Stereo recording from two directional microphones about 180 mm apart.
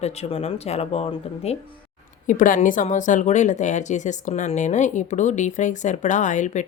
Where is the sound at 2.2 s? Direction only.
45° left (ahead or behind).